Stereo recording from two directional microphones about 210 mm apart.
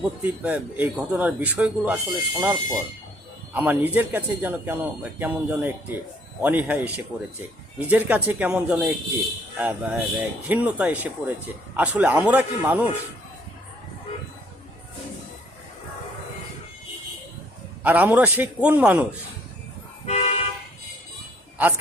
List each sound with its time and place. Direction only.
0.2 s speech: 10° right (ahead or behind)
17.8 s speech: 10° right (ahead or behind)
20.1 s toot: 30° left (ahead or behind)